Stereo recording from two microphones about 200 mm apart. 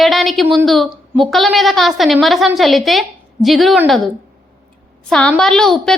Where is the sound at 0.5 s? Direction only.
Centre (ahead or behind).